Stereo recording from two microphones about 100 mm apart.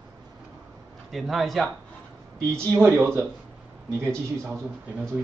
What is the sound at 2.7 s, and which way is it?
Speech, 25° right (ahead or behind).